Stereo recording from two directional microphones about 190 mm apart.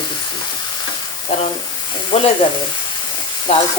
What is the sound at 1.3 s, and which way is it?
Speech, 35° left (ahead or behind).